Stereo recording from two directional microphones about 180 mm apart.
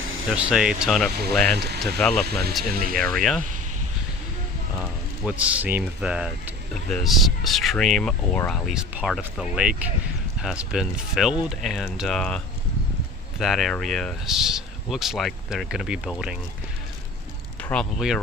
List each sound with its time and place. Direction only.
0.3 s speech: 5° right (ahead or behind)
2.2 s speech: 60° right (ahead or behind)
3.0 s speech: centre (ahead or behind)
5.2 s speech: 5° right (ahead or behind)
13.4 s speech: centre (ahead or behind)
17.6 s a sound: 10° left (ahead or behind)